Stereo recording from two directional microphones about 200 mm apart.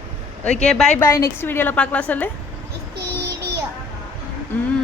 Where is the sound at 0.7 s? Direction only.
5° left (ahead or behind).